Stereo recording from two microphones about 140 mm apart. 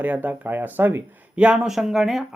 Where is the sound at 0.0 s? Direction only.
10° right (ahead or behind).